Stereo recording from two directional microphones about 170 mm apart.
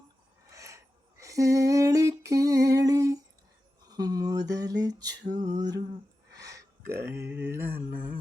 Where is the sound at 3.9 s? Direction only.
20° right (ahead or behind).